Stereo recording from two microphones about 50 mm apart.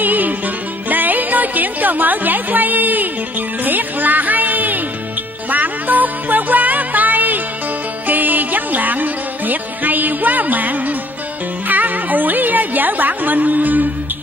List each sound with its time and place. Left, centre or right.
0.0 s music: right